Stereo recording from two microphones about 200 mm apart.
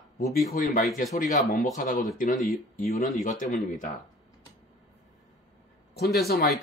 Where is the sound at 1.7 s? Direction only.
40° left (ahead or behind).